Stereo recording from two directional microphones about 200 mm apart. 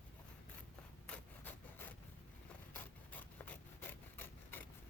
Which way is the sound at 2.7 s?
10° left (ahead or behind).